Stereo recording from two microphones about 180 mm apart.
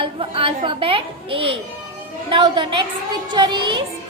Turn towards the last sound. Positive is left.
turn(degrees=-25)  # may be behind; listen again after turning